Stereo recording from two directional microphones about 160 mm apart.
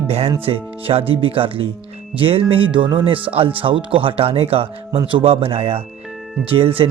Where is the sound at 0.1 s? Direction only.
40° right (ahead or behind).